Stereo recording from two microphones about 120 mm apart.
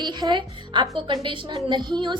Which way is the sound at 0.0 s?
40° right (ahead or behind).